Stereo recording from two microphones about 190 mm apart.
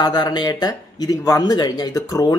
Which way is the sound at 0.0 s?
20° left (ahead or behind).